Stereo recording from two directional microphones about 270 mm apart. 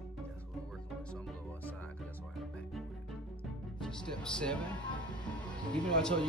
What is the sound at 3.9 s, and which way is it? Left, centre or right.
Speech, centre.